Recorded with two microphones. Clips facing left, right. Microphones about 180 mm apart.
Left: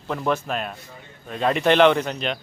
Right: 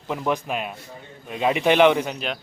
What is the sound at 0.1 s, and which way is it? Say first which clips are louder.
Speech: left 1 dB; 15° right (ahead or behind).